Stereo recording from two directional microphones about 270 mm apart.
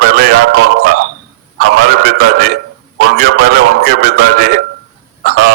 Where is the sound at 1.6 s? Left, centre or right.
Right.